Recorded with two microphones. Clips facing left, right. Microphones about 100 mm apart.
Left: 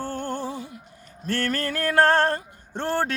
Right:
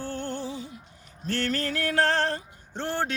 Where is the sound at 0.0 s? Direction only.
45° left (ahead or behind).